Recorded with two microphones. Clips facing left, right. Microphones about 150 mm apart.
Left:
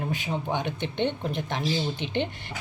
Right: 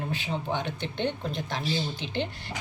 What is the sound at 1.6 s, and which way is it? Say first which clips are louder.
Speech: left 4 dB; 60° left (ahead or behind).